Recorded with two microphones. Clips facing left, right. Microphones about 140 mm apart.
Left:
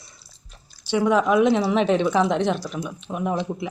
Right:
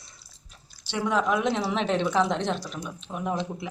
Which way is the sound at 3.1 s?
25° left (ahead or behind).